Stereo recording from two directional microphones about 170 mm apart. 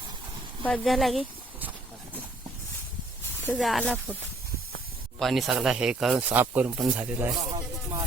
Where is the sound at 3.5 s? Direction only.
Centre (ahead or behind).